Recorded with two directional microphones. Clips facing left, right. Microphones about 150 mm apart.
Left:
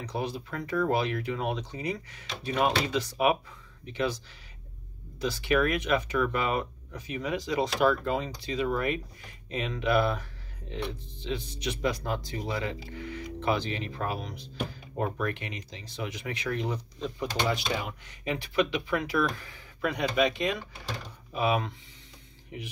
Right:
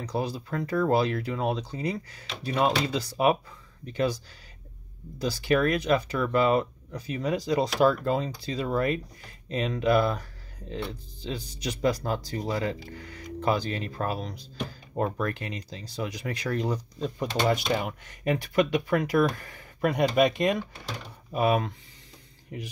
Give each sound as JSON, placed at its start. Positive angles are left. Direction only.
{"t": 0.0, "sound": "speech", "side_deg": -35}
{"t": 5.2, "sound": "speech", "side_deg": -40}